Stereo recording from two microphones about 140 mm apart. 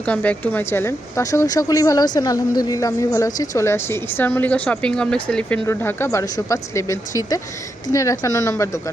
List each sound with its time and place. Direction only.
0.0 s speech: 10° left (ahead or behind)
5.6 s speech: 20° left (ahead or behind)